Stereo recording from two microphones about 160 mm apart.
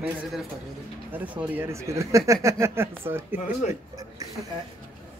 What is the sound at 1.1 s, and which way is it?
Speech, 10° right (ahead or behind).